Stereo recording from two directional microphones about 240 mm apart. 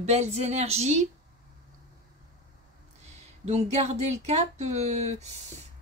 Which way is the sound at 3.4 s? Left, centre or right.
Right.